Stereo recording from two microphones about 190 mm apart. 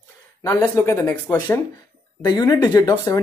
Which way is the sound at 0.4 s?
15° left (ahead or behind).